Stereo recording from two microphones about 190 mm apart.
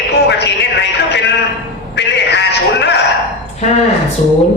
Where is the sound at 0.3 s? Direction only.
65° left (ahead or behind).